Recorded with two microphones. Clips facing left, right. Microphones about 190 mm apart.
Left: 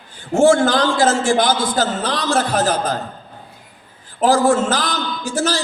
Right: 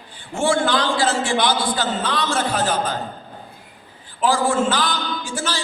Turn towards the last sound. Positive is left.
turn(degrees=40)  # may be behind; listen again after turning